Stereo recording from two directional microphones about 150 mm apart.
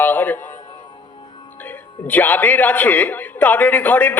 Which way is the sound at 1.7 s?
10° left (ahead or behind).